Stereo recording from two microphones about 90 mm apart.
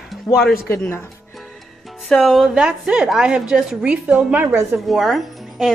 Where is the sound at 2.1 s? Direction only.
5° left (ahead or behind).